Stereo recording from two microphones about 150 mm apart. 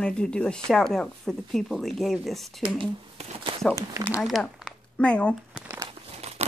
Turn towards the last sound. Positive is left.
turn(degrees=-40)  # may be behind; listen again after turning